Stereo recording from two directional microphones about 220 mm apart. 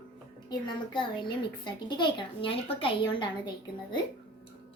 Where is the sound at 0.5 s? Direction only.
20° left (ahead or behind).